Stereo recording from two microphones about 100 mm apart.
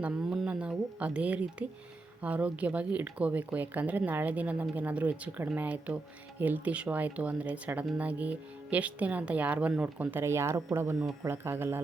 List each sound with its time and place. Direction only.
0.0 s speech: 10° right (ahead or behind); by 11.8 s 25° right (ahead or behind)